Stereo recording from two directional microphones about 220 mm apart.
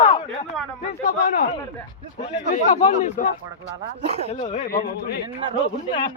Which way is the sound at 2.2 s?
30° left (ahead or behind).